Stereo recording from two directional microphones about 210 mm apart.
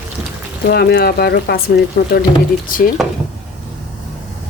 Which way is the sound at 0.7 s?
50° left (ahead or behind).